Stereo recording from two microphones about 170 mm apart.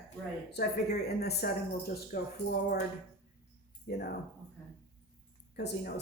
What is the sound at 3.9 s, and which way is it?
Speech, 65° left (ahead or behind).